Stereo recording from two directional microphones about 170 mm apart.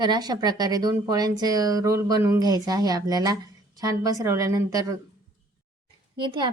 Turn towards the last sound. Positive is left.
turn(degrees=-25)  # may be behind; listen again after turning